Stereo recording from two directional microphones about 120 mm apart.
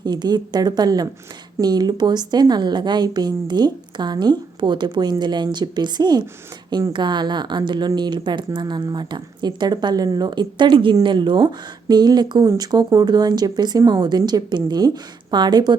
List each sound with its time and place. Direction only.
0.0 s speech: 35° right (ahead or behind)